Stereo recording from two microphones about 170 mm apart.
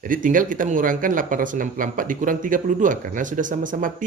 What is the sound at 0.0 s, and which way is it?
Speech, 50° right (ahead or behind).